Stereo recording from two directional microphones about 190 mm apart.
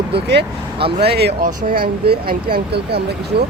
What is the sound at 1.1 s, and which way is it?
Speech, 60° right (ahead or behind).